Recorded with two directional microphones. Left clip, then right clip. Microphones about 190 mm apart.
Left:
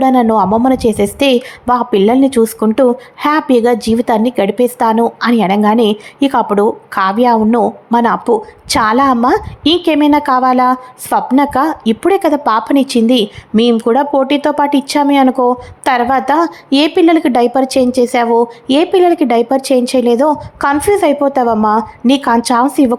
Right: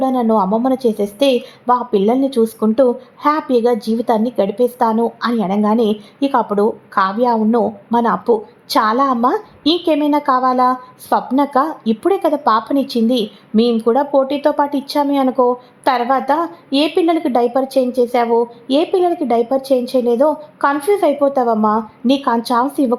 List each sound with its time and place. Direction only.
0.0 s a woman's voice: 20° left (ahead or behind)